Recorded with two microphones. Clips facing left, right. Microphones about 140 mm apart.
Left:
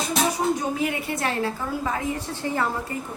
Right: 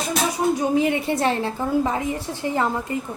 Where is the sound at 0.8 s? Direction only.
25° right (ahead or behind).